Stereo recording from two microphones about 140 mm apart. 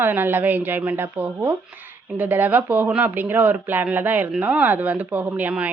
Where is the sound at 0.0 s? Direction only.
15° right (ahead or behind).